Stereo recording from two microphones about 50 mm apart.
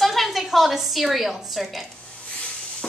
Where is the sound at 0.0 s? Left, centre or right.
Centre.